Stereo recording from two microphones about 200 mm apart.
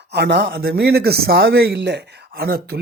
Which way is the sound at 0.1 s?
60° right (ahead or behind).